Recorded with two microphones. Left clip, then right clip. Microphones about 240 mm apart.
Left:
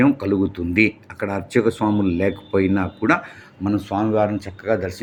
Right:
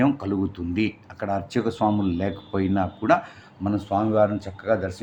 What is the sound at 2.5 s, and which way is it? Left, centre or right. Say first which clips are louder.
Speech: left 5 dB; centre.